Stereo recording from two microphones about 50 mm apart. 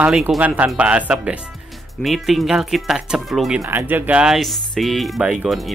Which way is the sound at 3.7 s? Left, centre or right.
Right.